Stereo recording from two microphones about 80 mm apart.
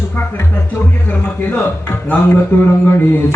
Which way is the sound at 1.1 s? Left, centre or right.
Left.